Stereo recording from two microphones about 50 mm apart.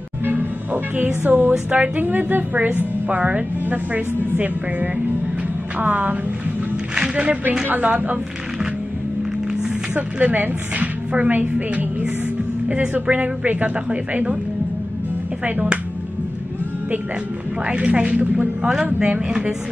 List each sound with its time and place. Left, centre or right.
0.2 s music: right
0.9 s a woman's voice: right
2.0 s a woman's voice: right
7.0 s a sound: right
7.6 s a woman's voice: right
9.9 s a woman's voice: right
11.5 s a woman's voice: right
15.4 s a woman's voice: right
17.6 s a woman's voice: right